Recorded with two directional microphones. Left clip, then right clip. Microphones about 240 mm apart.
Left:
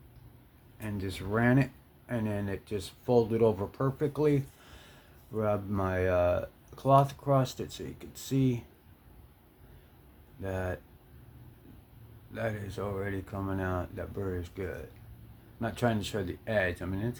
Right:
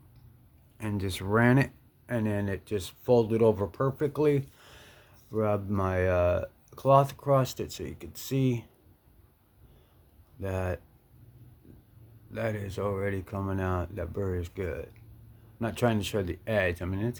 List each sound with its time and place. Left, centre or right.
0.8 s speech: right
10.4 s speech: right
12.3 s speech: right